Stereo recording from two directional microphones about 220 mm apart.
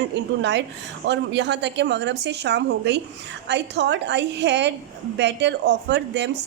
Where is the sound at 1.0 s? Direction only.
55° right (ahead or behind).